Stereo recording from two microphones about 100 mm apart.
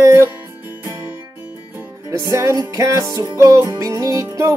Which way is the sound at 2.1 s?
30° right (ahead or behind).